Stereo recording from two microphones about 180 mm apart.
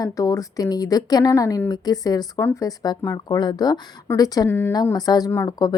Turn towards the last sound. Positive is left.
turn(degrees=20)  # may be behind; listen again after turning